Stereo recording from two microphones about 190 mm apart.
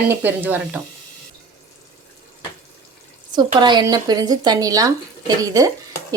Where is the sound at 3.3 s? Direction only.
20° right (ahead or behind).